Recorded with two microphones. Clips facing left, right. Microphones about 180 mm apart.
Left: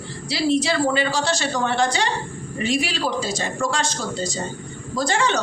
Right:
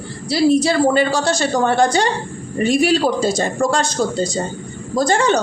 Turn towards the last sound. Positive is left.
turn(degrees=-40)  # may be behind; listen again after turning